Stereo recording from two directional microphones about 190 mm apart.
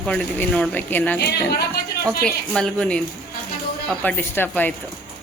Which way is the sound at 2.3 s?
5° left (ahead or behind).